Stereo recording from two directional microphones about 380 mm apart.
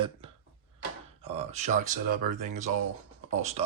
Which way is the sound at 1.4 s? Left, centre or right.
Centre.